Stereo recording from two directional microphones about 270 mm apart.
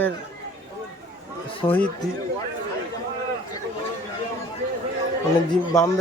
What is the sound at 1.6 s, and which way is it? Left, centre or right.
Speech, centre.